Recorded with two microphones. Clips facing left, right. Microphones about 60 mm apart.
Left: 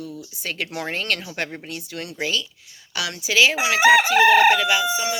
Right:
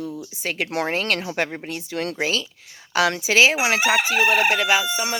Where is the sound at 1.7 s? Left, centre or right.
Right.